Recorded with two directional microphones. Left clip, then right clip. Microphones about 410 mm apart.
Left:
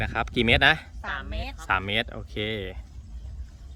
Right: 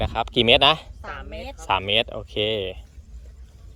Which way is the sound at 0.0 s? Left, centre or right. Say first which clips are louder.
Right 5 dB; centre.